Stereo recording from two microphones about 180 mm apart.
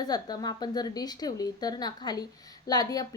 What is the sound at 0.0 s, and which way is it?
A woman's voice, 20° left (ahead or behind).